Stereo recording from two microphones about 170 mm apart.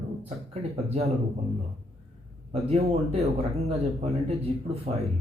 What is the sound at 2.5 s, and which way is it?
Speech, 35° right (ahead or behind).